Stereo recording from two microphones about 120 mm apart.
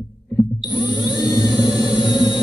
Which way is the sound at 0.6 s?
40° left (ahead or behind).